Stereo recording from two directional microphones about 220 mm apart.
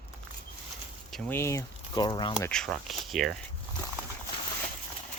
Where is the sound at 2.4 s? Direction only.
Centre (ahead or behind).